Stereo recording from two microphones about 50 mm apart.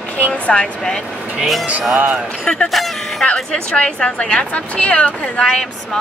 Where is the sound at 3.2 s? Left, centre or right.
Centre.